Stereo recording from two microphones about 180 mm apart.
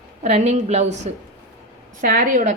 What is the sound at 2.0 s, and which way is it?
Speech, 50° right (ahead or behind).